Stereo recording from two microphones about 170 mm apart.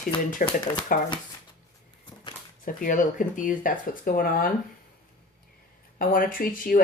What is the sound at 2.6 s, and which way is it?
Speech, 50° left (ahead or behind).